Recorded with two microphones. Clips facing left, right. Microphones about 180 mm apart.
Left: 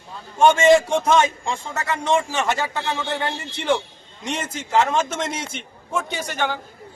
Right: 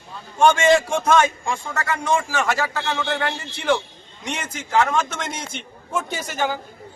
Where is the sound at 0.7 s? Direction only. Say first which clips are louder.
Left 2 dB; 20° left (ahead or behind).